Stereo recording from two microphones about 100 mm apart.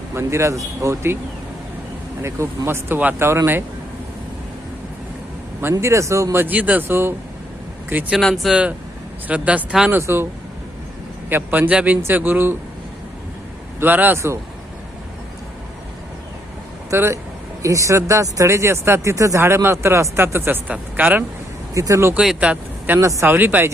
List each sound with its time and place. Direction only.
0.1 s speech: 25° right (ahead or behind)
2.2 s speech: 25° right (ahead or behind)
5.7 s speech: 30° right (ahead or behind)
8.1 s speech: centre (ahead or behind)
10.0 s speech: 25° right (ahead or behind)
11.3 s speech: 20° right (ahead or behind)
13.7 s speech: 20° right (ahead or behind)
16.9 s speech: 25° right (ahead or behind)
21.8 s speech: 30° right (ahead or behind)
22.1 s speech: 10° right (ahead or behind)
23.0 s speech: 35° right (ahead or behind)
23.2 s speech: 20° right (ahead or behind)